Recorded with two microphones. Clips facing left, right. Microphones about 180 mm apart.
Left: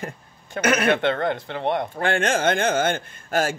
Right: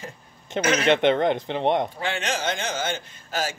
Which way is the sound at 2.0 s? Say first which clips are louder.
Left 6 dB; 50° left (ahead or behind).